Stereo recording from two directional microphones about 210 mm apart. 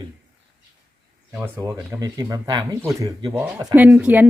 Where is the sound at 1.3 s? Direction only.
10° right (ahead or behind).